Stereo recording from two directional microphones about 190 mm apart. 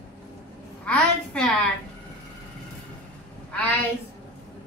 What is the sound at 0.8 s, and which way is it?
Speech, 5° left (ahead or behind).